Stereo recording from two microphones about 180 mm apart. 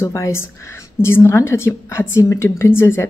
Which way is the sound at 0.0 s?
15° left (ahead or behind).